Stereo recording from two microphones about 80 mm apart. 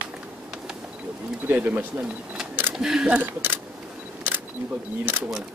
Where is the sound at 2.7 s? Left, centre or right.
Centre; by 3.6 s right.